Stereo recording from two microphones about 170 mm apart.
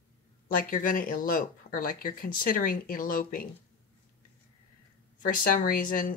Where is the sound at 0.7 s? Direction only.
50° left (ahead or behind).